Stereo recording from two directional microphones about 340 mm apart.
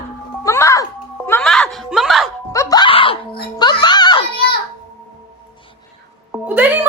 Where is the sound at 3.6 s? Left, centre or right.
Centre.